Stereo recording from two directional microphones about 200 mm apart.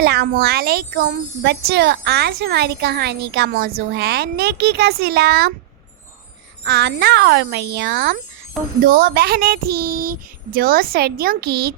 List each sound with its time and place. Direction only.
0.0 s speech: 55° right (ahead or behind)
6.7 s speech: 55° right (ahead or behind)